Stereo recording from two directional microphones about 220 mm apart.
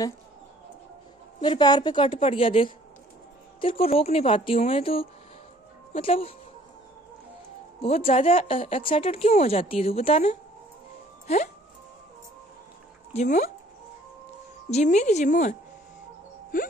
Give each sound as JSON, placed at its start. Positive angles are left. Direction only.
{"t": 1.4, "sound": "a woman's voice", "side_deg": 20}
{"t": 7.8, "sound": "a woman's voice", "side_deg": 25}
{"t": 13.1, "sound": "speech", "side_deg": 30}
{"t": 14.7, "sound": "speech", "side_deg": 30}
{"t": 16.5, "sound": "speech", "side_deg": 40}